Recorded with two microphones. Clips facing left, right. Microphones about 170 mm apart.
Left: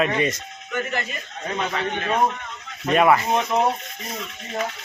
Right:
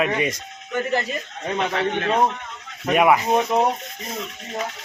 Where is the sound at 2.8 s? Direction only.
10° right (ahead or behind).